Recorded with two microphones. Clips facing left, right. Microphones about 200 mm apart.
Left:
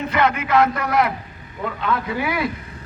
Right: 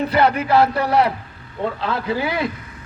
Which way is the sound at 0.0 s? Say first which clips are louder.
Right 3 dB; 35° right (ahead or behind).